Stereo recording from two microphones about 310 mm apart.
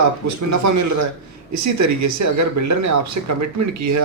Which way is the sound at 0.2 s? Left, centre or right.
Right.